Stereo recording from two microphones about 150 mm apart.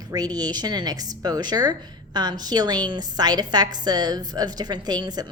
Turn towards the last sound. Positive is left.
turn(degrees=-25)  # may be behind; listen again after turning